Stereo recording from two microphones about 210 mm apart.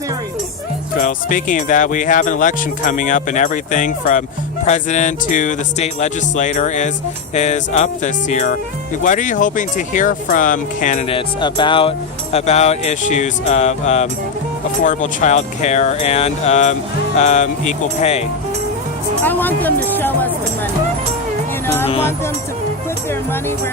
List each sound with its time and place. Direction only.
1.0 s music: 40° left (ahead or behind)
11.3 s music: 20° left (ahead or behind)
19.2 s speech: 10° left (ahead or behind)